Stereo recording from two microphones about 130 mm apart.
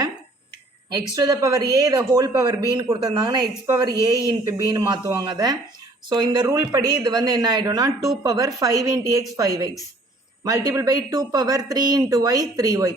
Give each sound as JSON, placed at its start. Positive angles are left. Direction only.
{"t": 0.9, "sound": "a woman's voice", "side_deg": -30}